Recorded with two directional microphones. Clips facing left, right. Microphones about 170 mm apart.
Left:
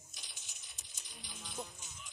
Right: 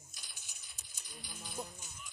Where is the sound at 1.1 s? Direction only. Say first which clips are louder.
Right 2 dB; 5° right (ahead or behind).